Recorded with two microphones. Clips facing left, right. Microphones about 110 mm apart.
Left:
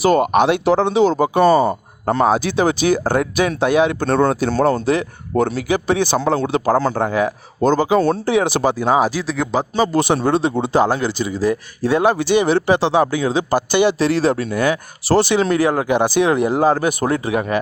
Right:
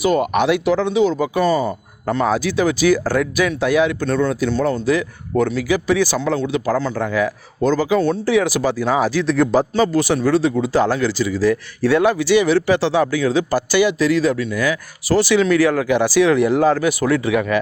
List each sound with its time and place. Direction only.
0.0 s speech: 30° left (ahead or behind)
4.0 s speech: 35° left (ahead or behind)
6.7 s speech: 45° left (ahead or behind); by 9.2 s 15° left (ahead or behind)
9.2 s speech: centre (ahead or behind)
9.7 s speech: 20° left (ahead or behind)
16.5 s speech: 40° left (ahead or behind)